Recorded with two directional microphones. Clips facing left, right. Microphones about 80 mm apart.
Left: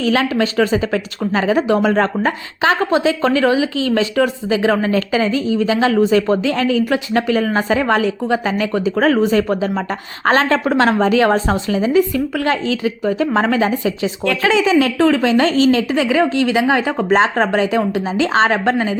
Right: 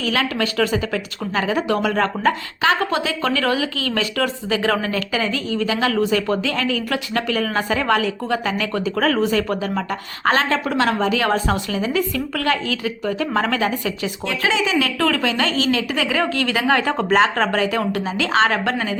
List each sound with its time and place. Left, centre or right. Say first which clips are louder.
0.0 s speech: left 5 dB; left
10.2 s a woman's voice: left 4 dB; left
14.4 s a woman's voice: left 6 dB; left
14.9 s speech: left 6 dB; left